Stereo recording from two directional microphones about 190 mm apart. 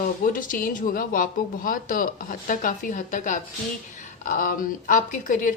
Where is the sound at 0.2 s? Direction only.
45° left (ahead or behind).